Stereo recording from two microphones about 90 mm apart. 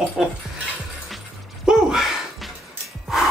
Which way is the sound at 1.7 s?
5° right (ahead or behind).